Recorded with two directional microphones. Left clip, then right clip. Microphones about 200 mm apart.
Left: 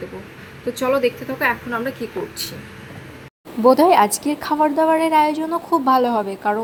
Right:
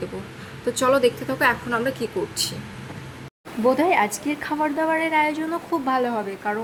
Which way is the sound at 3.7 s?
20° left (ahead or behind).